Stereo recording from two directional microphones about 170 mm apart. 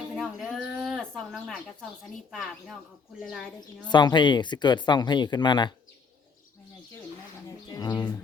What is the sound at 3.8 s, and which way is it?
Speech, 25° left (ahead or behind).